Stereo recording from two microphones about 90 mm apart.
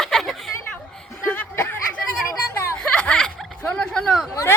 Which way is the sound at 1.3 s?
25° left (ahead or behind).